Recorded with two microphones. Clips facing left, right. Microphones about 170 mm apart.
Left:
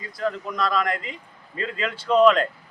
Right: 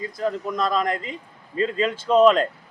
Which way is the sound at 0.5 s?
25° right (ahead or behind).